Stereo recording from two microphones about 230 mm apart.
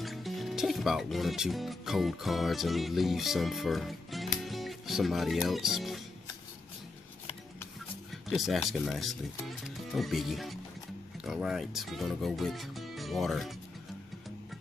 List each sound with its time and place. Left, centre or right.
0.0 s speech: centre
4.4 s music: centre
8.1 s speech: centre